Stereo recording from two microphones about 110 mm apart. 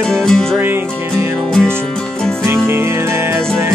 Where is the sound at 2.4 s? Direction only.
20° right (ahead or behind).